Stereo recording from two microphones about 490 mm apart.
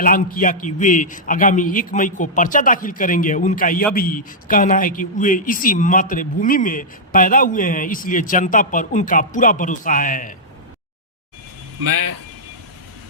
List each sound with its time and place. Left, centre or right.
0.0 s speech: centre
11.8 s a man's voice: right